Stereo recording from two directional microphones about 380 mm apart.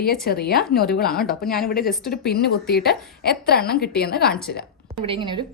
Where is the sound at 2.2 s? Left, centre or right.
Left.